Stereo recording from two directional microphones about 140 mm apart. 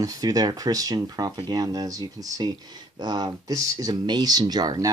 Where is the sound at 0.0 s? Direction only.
25° right (ahead or behind).